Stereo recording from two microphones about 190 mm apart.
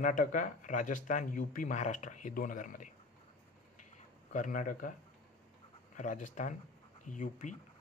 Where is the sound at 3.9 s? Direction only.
40° left (ahead or behind).